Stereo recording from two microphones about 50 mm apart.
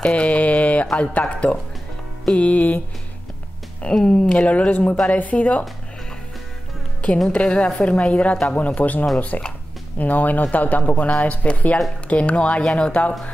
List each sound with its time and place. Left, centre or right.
0.0 s mantra: left
1.3 s a woman's voice: left
3.9 s a woman's voice: centre; by 5.7 s left
7.2 s a woman's voice: centre